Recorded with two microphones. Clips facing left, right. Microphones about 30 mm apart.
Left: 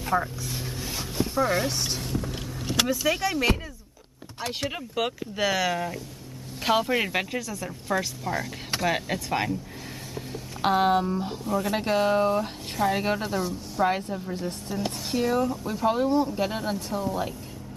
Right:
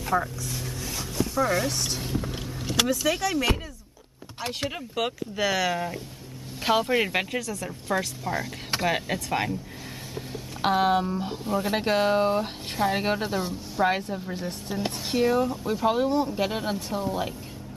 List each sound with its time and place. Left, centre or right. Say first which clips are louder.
0.0 s vehicle: even; centre
1.5 s speech: even; centre
2.0 s a sound: even; centre
2.3 s speech: even; centre
4.5 s speech: even; centre
10.6 s speech: even; centre
11.4 s speech: right 1 dB; right